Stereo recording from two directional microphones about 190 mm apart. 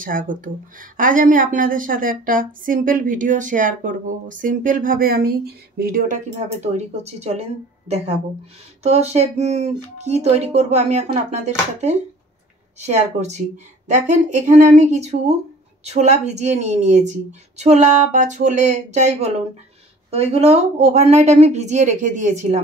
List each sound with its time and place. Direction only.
0.0 s a woman's voice: 45° right (ahead or behind)
8.8 s speech: 35° right (ahead or behind)